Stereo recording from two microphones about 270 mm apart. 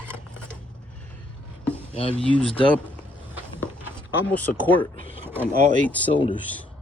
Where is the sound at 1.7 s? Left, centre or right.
Left.